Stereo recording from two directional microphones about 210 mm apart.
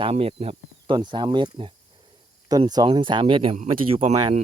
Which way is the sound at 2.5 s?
20° right (ahead or behind).